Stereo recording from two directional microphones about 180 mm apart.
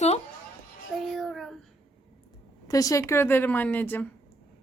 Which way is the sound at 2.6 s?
20° left (ahead or behind).